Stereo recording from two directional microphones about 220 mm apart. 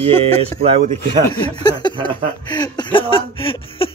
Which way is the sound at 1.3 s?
20° left (ahead or behind).